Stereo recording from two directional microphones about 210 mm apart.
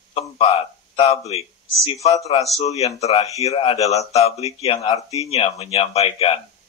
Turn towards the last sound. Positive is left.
turn(degrees=30)  # may be behind; listen again after turning